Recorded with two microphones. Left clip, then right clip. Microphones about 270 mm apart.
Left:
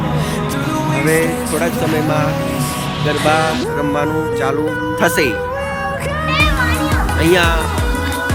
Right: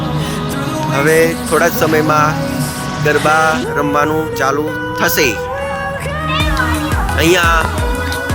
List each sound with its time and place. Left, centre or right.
0.9 s speech: centre
7.2 s speech: centre